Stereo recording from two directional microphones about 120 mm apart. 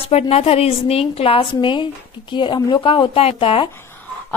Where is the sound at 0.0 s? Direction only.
55° left (ahead or behind).